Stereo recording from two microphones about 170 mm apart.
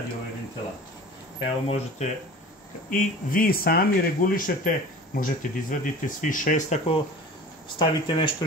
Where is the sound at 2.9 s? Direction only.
55° left (ahead or behind).